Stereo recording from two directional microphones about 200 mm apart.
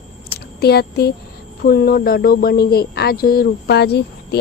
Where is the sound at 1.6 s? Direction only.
50° left (ahead or behind).